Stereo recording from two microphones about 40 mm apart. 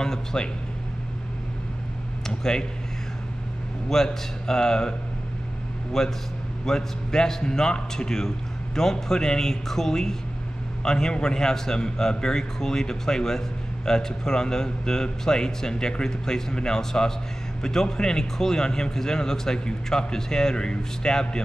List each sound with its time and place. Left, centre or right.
0.0 s a man's voice: centre
2.2 s speech: centre
3.9 s a man's voice: centre
6.0 s a man's voice: centre